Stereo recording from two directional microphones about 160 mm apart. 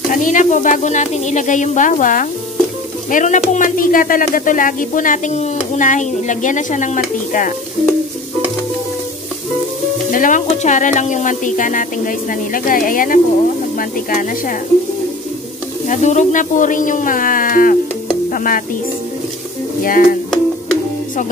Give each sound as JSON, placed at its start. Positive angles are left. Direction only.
{"t": 0.1, "sound": "speech", "side_deg": 55}
{"t": 10.1, "sound": "speech", "side_deg": 55}
{"t": 15.9, "sound": "speech", "side_deg": 50}
{"t": 18.3, "sound": "music", "side_deg": 60}
{"t": 19.8, "sound": "speech", "side_deg": 60}